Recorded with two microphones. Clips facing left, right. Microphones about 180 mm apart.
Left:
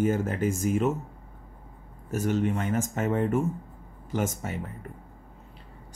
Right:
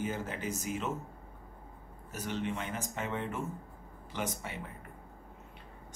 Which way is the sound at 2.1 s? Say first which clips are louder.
Left 10 dB; 45° left (ahead or behind).